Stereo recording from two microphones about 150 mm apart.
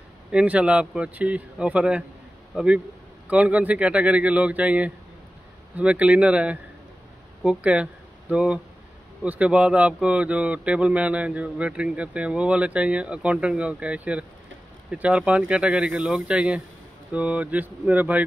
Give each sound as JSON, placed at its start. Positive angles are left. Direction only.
{"t": 0.3, "sound": "a man's voice", "side_deg": -5}